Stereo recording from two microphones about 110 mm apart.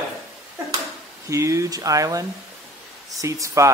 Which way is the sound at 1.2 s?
25° right (ahead or behind).